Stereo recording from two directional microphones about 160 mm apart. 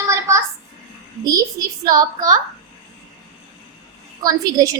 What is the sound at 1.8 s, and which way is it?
Speech, 25° right (ahead or behind).